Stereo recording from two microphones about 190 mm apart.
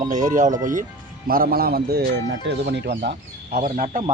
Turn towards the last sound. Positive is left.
turn(degrees=-45)  # may be behind; listen again after turning